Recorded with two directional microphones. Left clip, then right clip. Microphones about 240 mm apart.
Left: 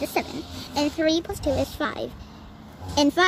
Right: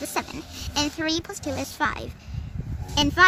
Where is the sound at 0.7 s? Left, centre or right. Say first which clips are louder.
Left 3 dB; right.